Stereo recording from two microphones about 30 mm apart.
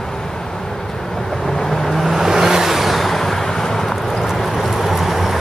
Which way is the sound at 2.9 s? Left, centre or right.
Centre.